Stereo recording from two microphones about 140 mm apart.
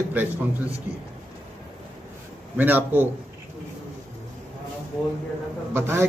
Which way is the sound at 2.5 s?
10° right (ahead or behind).